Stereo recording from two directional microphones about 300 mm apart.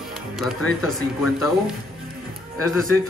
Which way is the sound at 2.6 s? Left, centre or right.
Left.